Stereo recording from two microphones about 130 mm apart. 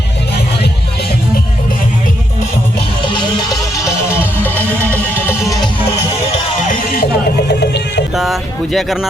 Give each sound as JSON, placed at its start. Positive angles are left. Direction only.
{"t": 3.1, "sound": "music", "side_deg": 35}
{"t": 5.1, "sound": "music", "side_deg": 15}
{"t": 6.7, "sound": "music", "side_deg": 90}
{"t": 8.1, "sound": "a sound", "side_deg": 0}